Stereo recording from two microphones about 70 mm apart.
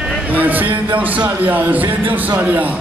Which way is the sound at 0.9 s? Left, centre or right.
Right.